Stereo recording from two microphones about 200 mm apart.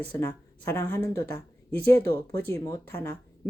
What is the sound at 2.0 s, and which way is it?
Speech, 50° right (ahead or behind).